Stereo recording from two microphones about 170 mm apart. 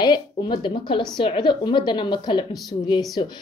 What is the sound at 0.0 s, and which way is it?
A woman's voice, 30° left (ahead or behind).